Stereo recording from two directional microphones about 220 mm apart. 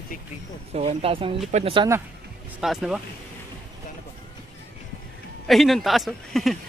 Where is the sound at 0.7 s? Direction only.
25° right (ahead or behind).